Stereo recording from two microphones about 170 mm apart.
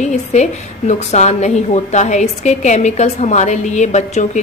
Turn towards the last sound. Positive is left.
turn(degrees=45)  # may be behind; listen again after turning